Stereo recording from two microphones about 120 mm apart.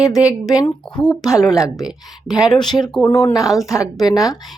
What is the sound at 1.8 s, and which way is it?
Speech, 5° right (ahead or behind).